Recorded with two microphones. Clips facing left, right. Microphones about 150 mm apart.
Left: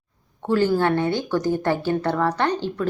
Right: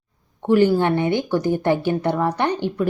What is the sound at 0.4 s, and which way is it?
A woman's voice, 15° right (ahead or behind).